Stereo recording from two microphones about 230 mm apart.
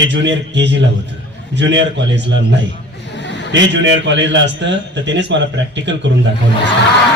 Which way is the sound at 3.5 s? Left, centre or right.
Right.